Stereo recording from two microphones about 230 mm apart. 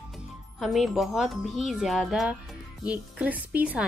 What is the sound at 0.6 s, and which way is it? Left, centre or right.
Speech, centre.